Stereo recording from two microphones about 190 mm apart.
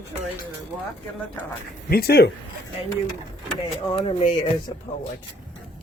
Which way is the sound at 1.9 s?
55° left (ahead or behind).